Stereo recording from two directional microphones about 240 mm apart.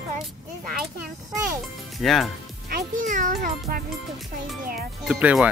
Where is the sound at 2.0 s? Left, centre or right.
Centre.